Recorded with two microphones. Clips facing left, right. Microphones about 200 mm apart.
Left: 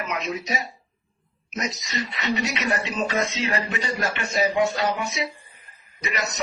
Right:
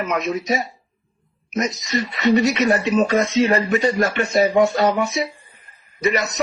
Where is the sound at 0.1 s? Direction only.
50° right (ahead or behind).